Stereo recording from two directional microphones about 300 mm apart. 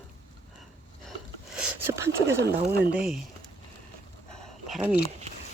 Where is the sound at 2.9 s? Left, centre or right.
Centre.